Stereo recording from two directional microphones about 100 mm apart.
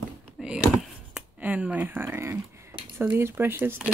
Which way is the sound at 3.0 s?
20° right (ahead or behind).